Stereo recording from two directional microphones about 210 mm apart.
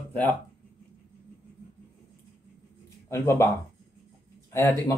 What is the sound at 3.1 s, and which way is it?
Speech, 15° left (ahead or behind).